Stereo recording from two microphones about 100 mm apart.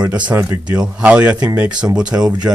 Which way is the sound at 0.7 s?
10° right (ahead or behind).